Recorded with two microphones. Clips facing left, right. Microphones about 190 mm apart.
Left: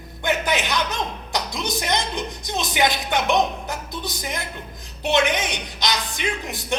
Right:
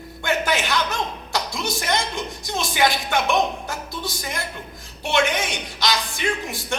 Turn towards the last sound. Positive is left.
turn(degrees=20)  # may be behind; listen again after turning